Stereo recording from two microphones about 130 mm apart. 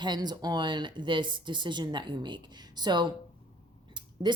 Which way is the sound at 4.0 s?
40° right (ahead or behind).